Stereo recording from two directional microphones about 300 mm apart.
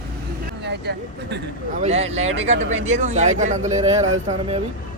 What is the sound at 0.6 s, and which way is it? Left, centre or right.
Speech, right.